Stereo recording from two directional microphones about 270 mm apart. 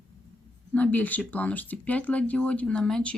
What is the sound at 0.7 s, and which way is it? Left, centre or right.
Speech, centre.